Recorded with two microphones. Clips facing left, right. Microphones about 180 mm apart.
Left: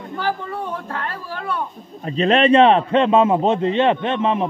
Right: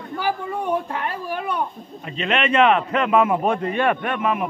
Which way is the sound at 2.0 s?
35° left (ahead or behind).